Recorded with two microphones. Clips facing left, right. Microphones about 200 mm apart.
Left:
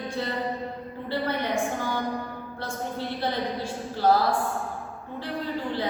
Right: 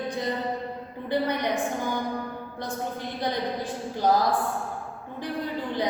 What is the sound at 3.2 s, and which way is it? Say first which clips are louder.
A woman's voice: right 2 dB; 15° right (ahead or behind).